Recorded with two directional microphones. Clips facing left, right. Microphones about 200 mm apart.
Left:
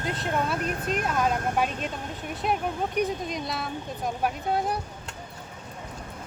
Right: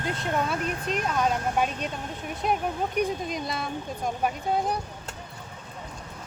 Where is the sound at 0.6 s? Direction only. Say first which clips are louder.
Left 1 dB; 45° left (ahead or behind).